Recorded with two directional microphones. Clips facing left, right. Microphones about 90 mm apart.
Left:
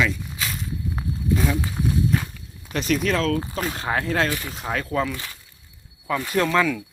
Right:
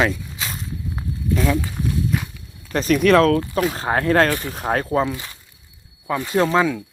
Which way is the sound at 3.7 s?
35° right (ahead or behind).